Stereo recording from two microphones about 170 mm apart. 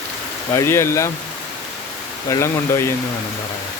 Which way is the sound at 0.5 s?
15° left (ahead or behind).